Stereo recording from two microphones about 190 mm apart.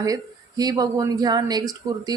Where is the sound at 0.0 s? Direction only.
20° right (ahead or behind).